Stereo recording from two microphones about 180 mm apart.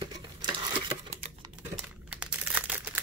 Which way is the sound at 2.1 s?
5° right (ahead or behind).